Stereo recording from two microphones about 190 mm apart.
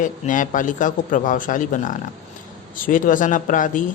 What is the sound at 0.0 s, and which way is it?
Speech, 45° left (ahead or behind).